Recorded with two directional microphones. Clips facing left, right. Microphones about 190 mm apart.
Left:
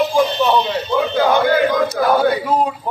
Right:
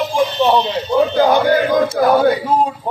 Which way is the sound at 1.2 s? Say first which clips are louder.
Left 1 dB; 15° right (ahead or behind).